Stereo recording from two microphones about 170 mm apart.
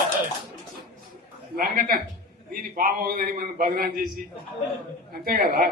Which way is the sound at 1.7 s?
60° right (ahead or behind).